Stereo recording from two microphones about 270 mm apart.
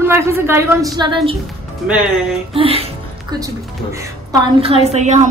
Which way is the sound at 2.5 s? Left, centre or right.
Right.